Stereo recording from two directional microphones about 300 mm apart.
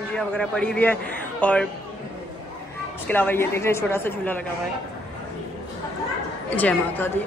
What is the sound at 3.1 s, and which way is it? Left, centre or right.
A woman's voice, centre.